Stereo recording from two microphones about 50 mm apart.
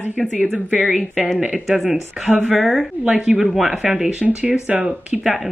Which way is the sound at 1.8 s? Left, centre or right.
Centre.